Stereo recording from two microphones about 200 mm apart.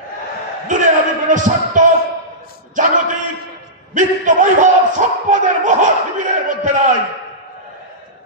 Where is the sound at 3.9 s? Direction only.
40° right (ahead or behind).